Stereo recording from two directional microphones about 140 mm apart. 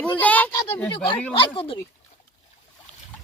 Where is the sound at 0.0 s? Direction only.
10° left (ahead or behind).